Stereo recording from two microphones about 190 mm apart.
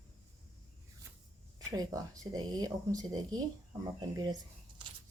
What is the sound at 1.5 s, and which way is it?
Speech, 20° right (ahead or behind).